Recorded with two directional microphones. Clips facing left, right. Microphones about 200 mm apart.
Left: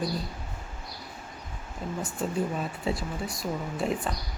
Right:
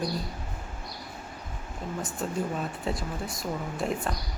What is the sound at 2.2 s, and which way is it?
Speech, centre (ahead or behind).